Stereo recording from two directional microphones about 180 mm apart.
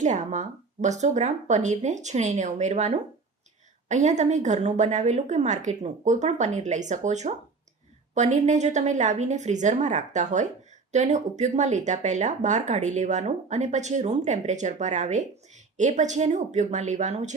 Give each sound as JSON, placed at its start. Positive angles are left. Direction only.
{"t": 0.0, "sound": "speech", "side_deg": -40}